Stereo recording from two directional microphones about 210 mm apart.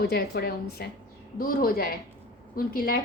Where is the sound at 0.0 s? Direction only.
50° left (ahead or behind).